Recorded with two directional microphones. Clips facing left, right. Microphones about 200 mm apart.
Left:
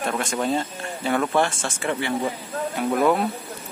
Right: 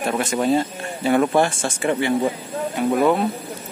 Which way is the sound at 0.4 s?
10° right (ahead or behind).